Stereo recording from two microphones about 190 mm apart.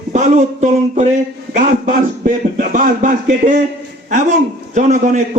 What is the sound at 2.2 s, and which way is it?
A man's voice, 45° right (ahead or behind).